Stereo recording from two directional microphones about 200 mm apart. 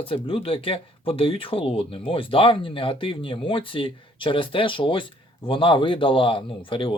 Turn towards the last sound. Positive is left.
turn(degrees=25)  # may be behind; listen again after turning